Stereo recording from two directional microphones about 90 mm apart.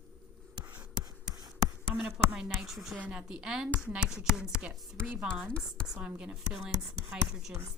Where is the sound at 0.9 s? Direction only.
45° right (ahead or behind).